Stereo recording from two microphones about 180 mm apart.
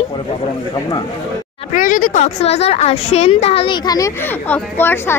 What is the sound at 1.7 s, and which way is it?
A woman's voice, 50° left (ahead or behind).